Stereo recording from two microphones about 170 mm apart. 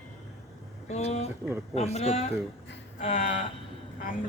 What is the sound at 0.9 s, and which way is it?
Speech, 40° left (ahead or behind).